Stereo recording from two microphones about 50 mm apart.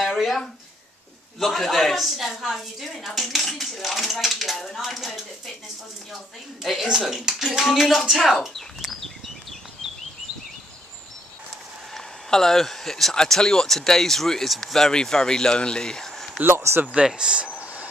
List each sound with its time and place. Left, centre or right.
0.0 s a sound: centre
1.4 s a woman's voice: centre
6.6 s a woman's voice: centre
12.3 s speech: centre
16.4 s speech: right
16.8 s speech: centre